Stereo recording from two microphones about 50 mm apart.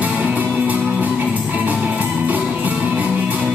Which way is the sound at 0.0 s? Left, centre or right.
Right.